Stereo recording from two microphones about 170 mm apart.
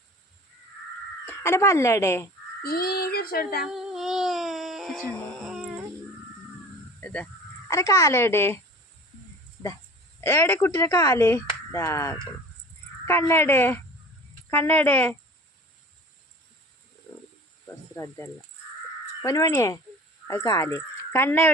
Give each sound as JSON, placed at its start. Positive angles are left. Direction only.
{"t": 1.2, "sound": "speech", "side_deg": 15}
{"t": 2.6, "sound": "child singing", "side_deg": 65}
{"t": 3.6, "sound": "a sound", "side_deg": -5}
{"t": 7.0, "sound": "speech", "side_deg": 5}
{"t": 7.7, "sound": "speech", "side_deg": 20}
{"t": 10.2, "sound": "speech", "side_deg": 15}
{"t": 17.9, "sound": "speech", "side_deg": 15}